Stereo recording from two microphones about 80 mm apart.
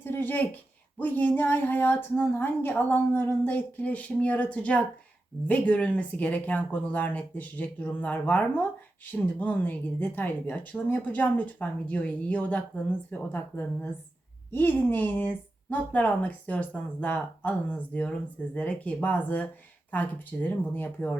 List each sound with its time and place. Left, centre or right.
0.0 s speech: left